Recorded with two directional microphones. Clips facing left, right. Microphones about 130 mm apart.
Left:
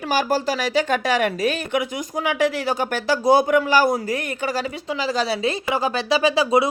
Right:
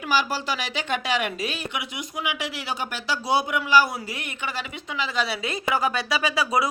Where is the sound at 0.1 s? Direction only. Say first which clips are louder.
Left 4 dB; 45° left (ahead or behind).